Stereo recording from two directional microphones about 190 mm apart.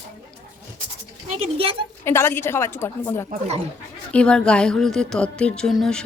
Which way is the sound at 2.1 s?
15° left (ahead or behind).